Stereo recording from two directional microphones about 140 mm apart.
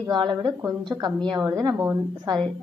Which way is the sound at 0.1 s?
35° right (ahead or behind).